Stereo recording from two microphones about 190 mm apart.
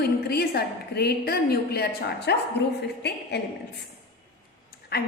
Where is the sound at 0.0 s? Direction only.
55° left (ahead or behind).